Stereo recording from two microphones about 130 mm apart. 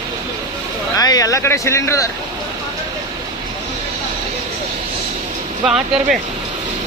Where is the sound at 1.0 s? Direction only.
30° left (ahead or behind).